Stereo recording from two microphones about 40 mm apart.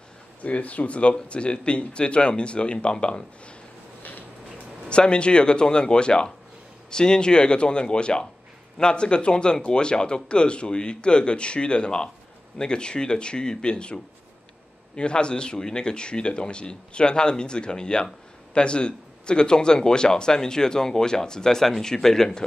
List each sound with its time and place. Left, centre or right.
0.4 s speech: left
4.8 s speech: left